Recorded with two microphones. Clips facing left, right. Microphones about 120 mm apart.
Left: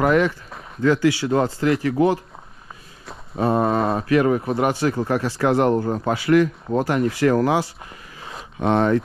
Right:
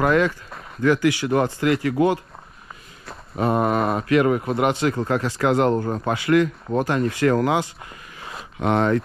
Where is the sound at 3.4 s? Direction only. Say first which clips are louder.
Left 1 dB; 35° left (ahead or behind).